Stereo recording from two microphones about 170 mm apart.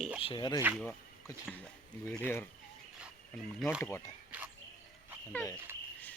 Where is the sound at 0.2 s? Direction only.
30° left (ahead or behind).